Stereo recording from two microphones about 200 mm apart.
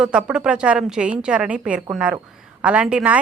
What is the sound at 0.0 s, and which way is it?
A woman's voice, 5° right (ahead or behind).